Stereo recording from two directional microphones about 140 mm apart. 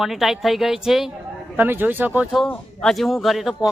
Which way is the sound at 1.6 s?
15° right (ahead or behind).